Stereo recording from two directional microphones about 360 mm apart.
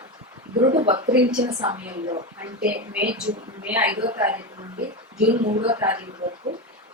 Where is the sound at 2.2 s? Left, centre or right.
Right.